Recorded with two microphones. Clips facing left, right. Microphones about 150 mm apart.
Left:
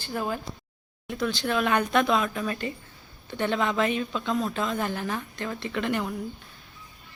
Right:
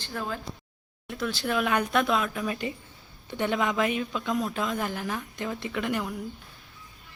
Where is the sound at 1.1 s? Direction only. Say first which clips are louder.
Left 2 dB; 5° right (ahead or behind).